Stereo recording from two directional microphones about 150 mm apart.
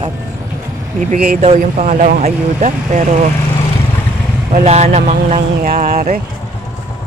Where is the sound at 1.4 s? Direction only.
50° right (ahead or behind).